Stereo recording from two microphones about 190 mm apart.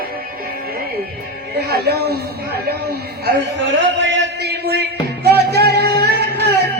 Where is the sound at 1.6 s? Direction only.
60° right (ahead or behind).